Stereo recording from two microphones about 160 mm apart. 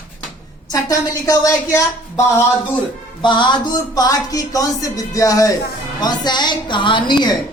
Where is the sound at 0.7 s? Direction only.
20° left (ahead or behind).